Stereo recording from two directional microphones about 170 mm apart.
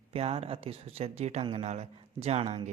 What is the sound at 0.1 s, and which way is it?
Speech, 35° right (ahead or behind).